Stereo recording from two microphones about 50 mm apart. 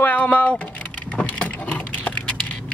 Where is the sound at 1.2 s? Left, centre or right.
Left.